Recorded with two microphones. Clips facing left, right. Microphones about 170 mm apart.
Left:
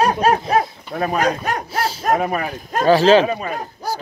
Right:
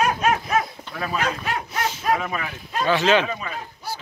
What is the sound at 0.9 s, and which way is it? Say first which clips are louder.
Speech: left 7 dB; 45° left (ahead or behind).